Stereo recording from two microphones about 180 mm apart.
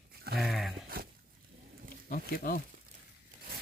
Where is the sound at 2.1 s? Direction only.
55° left (ahead or behind).